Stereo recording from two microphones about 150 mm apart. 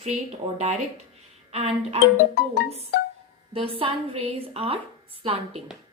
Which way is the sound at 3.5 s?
40° right (ahead or behind).